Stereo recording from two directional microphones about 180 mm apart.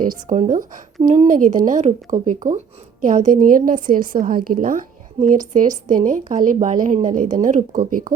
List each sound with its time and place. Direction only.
0.0 s a woman's voice: 45° right (ahead or behind)